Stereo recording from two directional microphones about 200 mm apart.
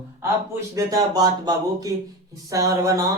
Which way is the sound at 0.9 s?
20° right (ahead or behind).